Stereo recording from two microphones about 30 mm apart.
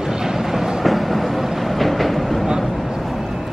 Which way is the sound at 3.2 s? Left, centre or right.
Centre.